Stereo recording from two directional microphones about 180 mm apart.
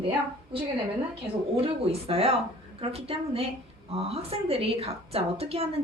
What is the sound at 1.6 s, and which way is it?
A woman's voice, 30° right (ahead or behind).